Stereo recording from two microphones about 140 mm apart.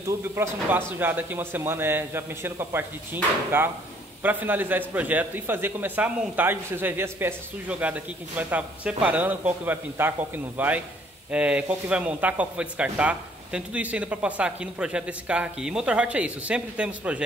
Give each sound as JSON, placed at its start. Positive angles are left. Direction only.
{"t": 0.0, "sound": "a man's voice", "side_deg": -20}